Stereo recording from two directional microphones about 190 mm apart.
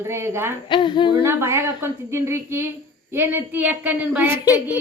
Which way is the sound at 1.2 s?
15° right (ahead or behind).